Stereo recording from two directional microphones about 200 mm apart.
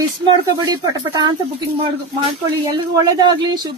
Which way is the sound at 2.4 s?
20° right (ahead or behind).